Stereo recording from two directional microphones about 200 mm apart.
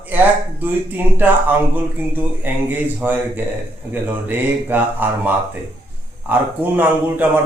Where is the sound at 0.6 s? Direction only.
10° right (ahead or behind).